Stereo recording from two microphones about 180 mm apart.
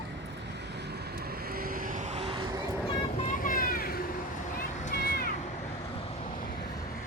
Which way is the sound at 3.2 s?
50° left (ahead or behind).